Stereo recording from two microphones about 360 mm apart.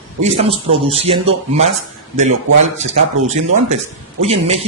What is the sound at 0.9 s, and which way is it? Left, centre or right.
Speech, centre.